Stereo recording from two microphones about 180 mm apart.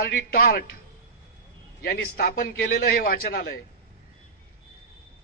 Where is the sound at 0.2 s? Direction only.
55° left (ahead or behind).